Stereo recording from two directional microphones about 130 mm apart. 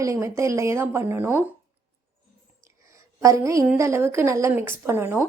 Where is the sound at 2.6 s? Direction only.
25° right (ahead or behind).